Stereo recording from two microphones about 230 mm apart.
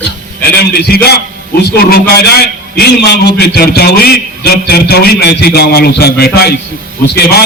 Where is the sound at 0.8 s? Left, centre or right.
Left.